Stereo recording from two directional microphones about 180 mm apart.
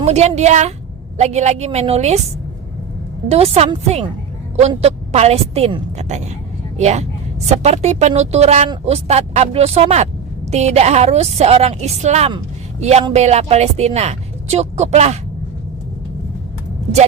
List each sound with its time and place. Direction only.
0.0 s speech: 35° right (ahead or behind)
3.2 s a woman's voice: 35° right (ahead or behind)